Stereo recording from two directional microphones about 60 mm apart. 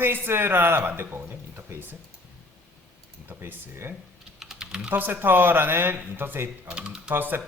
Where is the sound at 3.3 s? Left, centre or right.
Right.